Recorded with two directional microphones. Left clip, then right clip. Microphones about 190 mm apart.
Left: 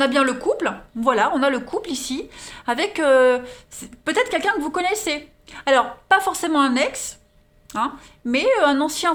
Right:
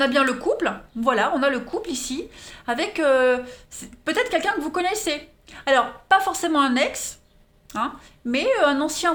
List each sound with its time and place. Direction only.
0.0 s speech: 20° left (ahead or behind)